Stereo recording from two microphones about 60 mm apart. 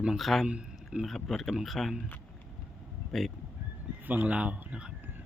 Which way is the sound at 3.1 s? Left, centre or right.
Centre.